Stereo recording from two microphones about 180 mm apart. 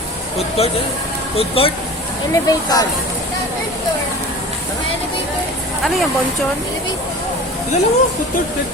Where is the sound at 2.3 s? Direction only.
20° left (ahead or behind).